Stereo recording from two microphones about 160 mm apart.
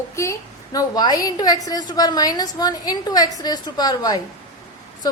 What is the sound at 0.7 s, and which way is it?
A woman's voice, 25° left (ahead or behind).